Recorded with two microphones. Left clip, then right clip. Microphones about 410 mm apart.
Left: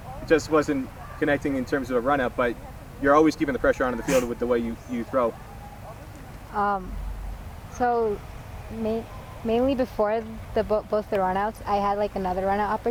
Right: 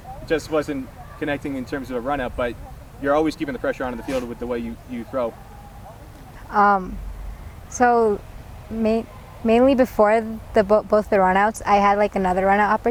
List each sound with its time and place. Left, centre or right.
0.3 s speech: centre
6.5 s speech: right
9.5 s speech: right